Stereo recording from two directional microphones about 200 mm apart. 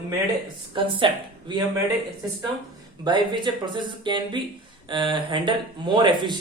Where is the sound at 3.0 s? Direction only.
25° right (ahead or behind).